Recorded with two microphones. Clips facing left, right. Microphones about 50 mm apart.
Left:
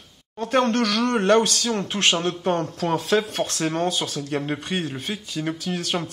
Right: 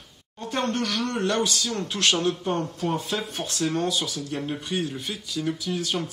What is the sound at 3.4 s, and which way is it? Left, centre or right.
Speech, left.